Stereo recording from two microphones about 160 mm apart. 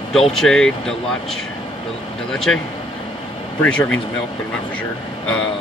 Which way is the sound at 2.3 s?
5° left (ahead or behind).